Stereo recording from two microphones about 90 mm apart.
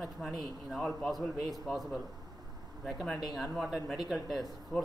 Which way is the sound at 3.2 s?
Centre (ahead or behind).